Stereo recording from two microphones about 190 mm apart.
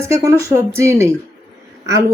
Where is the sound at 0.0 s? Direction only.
15° right (ahead or behind).